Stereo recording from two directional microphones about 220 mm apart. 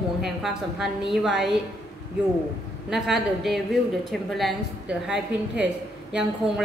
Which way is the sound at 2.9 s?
Centre (ahead or behind).